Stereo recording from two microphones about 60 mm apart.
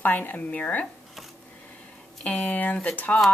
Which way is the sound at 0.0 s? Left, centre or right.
Left.